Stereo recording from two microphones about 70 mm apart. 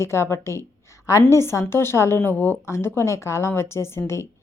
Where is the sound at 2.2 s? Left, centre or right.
Left.